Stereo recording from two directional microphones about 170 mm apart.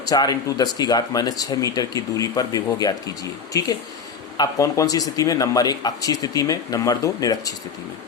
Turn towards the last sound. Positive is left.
turn(degrees=20)  # may be behind; listen again after turning